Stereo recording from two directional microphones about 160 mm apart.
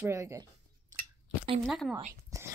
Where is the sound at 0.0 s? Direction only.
20° right (ahead or behind).